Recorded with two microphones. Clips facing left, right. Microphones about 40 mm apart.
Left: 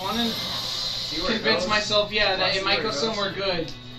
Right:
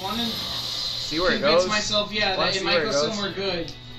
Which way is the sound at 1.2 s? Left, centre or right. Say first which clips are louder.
Right 5 dB; centre.